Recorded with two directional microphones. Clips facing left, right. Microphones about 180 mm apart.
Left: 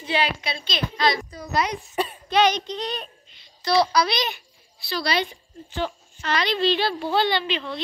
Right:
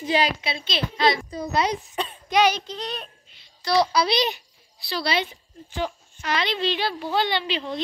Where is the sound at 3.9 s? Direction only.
30° right (ahead or behind).